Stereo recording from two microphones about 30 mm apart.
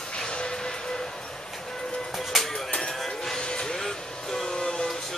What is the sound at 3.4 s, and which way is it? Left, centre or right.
Music, left.